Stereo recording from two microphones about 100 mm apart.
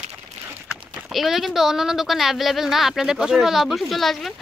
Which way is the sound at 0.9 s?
Centre (ahead or behind).